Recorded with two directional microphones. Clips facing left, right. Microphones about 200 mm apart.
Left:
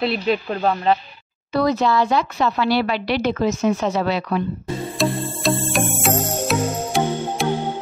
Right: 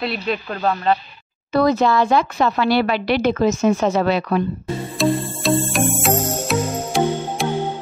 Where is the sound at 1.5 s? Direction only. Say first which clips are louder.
Right 2 dB; 50° right (ahead or behind).